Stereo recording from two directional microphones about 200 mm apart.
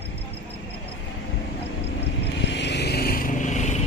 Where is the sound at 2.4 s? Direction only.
60° left (ahead or behind); by 3.8 s 35° left (ahead or behind).